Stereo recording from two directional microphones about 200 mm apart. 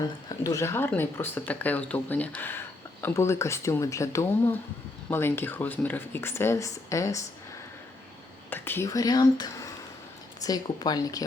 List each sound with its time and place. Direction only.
0.0 s speech: 15° left (ahead or behind)
8.4 s speech: 10° left (ahead or behind)